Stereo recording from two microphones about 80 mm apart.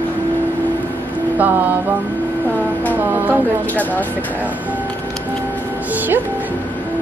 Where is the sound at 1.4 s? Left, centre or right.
Right.